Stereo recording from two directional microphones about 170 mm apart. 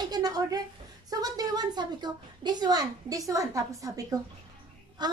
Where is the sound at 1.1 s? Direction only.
20° right (ahead or behind).